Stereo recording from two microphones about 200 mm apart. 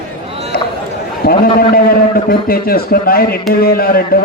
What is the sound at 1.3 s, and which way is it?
A man's voice, 50° left (ahead or behind).